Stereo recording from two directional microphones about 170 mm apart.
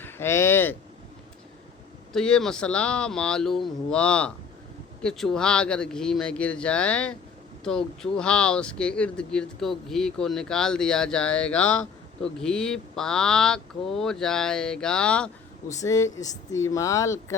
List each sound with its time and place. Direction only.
0.0 s speech: 15° left (ahead or behind)
2.1 s speech: 5° left (ahead or behind)
15.7 s speech: 20° left (ahead or behind)